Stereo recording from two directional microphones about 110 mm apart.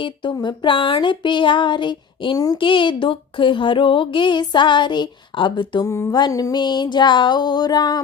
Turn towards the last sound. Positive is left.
turn(degrees=40)  # may be behind; listen again after turning